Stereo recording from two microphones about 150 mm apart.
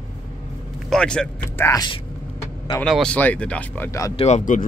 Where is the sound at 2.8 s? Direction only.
5° left (ahead or behind); by 4.1 s 20° left (ahead or behind).